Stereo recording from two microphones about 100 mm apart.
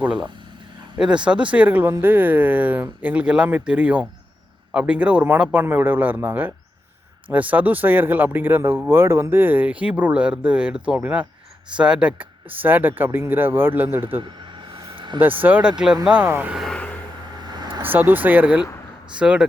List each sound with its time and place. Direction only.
0.0 s speech: 10° right (ahead or behind)
14.9 s vehicle: 50° right (ahead or behind)
15.4 s speech: 15° right (ahead or behind)
16.7 s vehicle: 15° left (ahead or behind)
17.4 s vehicle: 45° right (ahead or behind)
17.8 s speech: 20° right (ahead or behind)